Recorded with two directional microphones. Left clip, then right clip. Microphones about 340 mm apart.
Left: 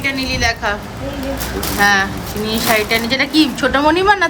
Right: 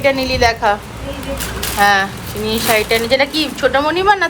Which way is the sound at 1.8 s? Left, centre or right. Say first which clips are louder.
Right 1 dB; centre.